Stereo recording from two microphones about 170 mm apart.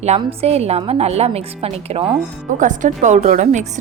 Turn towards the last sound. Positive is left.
turn(degrees=-45)  # may be behind; listen again after turning